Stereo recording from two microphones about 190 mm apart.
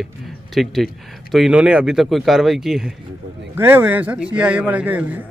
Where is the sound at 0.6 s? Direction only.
Centre (ahead or behind).